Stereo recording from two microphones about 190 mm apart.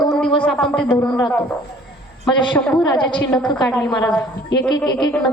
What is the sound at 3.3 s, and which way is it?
Speech, 5° left (ahead or behind).